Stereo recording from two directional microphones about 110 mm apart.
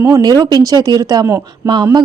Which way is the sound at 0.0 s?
35° right (ahead or behind).